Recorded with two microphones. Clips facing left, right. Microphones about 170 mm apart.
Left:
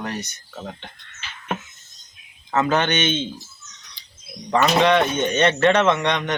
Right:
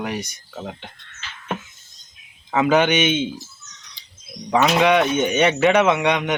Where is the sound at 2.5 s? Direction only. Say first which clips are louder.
Right 3 dB; 10° right (ahead or behind).